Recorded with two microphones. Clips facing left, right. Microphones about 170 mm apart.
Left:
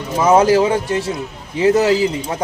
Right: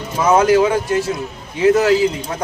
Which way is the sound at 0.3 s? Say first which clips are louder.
Left 1 dB; 30° left (ahead or behind).